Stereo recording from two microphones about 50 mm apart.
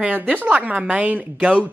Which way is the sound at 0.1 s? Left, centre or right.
Right.